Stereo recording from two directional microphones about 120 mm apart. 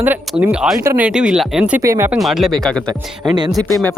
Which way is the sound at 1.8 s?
20° right (ahead or behind).